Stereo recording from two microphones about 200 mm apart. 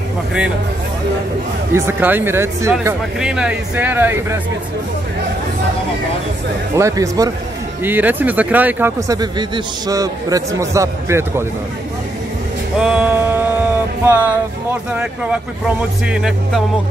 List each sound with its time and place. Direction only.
1.7 s speech: 10° right (ahead or behind)
6.7 s speech: 15° right (ahead or behind)
12.8 s music: 5° right (ahead or behind)
14.0 s speech: 10° right (ahead or behind)
16.1 s speech: centre (ahead or behind)